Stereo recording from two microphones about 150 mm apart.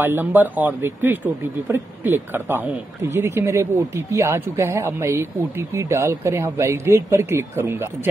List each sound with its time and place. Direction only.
0.0 s speech: 15° right (ahead or behind)